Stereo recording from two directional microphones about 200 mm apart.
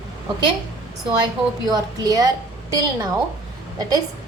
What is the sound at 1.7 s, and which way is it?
A woman's voice, 20° right (ahead or behind).